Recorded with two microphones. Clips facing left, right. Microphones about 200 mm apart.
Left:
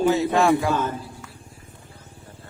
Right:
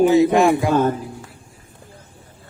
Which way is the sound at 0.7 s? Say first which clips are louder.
Right 8 dB; 40° right (ahead or behind).